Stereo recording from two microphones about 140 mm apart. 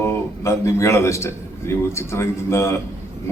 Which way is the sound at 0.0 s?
20° left (ahead or behind).